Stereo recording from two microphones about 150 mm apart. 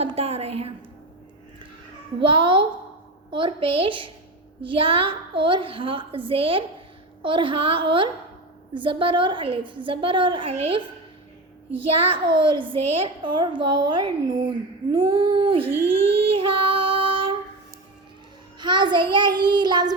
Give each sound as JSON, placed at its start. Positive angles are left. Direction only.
{"t": 0.0, "sound": "a sound", "side_deg": -40}
{"t": 2.2, "sound": "a woman's voice", "side_deg": -35}
{"t": 14.9, "sound": "music", "side_deg": -30}
{"t": 18.6, "sound": "a woman's voice", "side_deg": -30}
{"t": 19.1, "sound": "child singing", "side_deg": -30}